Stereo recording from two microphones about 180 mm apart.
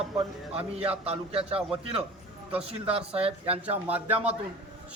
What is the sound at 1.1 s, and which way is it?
A man's voice, 35° right (ahead or behind).